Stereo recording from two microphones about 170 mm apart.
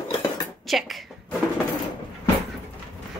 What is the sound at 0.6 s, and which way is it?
Speech, centre (ahead or behind).